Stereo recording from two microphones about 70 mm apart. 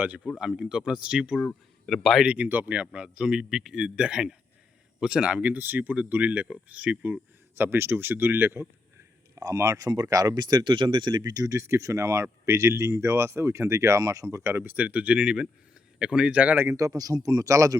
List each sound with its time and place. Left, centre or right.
0.3 s speech: centre
1.9 s speech: centre
2.2 s speech: right
9.4 s speech: right
11.5 s speech: right
14.5 s speech: right
16.7 s speech: right